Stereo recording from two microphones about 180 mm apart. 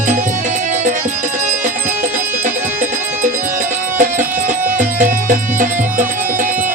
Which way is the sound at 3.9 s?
45° right (ahead or behind).